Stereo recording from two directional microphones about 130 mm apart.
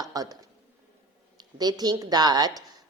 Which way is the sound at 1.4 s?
30° right (ahead or behind).